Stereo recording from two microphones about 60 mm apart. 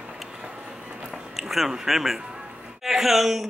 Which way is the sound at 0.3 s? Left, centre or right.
Centre.